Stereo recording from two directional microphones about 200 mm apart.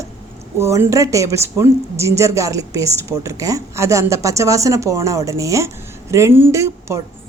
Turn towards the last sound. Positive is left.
turn(degrees=-15)  # may be behind; listen again after turning